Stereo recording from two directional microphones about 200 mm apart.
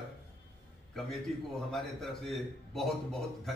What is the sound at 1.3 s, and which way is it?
A man's voice, 5° left (ahead or behind).